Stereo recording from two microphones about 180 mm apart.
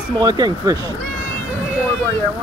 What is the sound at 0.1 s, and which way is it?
Speech, 25° right (ahead or behind).